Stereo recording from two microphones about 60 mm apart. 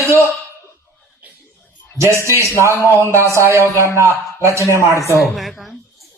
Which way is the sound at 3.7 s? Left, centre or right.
Left.